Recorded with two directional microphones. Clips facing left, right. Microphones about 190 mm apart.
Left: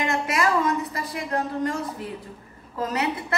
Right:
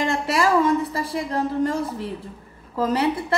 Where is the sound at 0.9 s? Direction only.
30° right (ahead or behind).